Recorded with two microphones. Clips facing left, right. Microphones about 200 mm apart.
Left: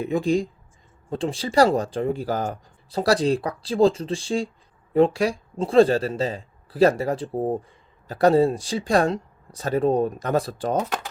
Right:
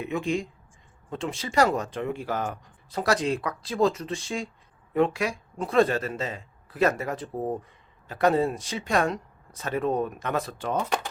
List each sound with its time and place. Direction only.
0.0 s speech: 35° left (ahead or behind)